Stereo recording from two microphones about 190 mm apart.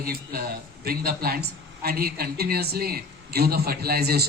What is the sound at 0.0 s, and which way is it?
A man's voice, 50° right (ahead or behind).